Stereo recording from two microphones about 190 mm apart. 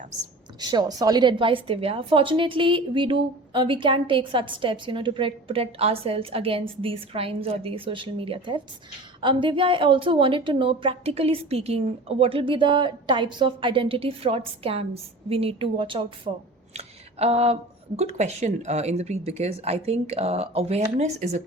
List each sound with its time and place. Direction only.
0.6 s a woman's voice: 20° right (ahead or behind); by 21.4 s 35° right (ahead or behind)